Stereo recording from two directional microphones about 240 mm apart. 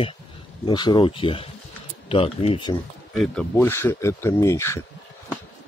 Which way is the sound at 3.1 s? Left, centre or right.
Centre.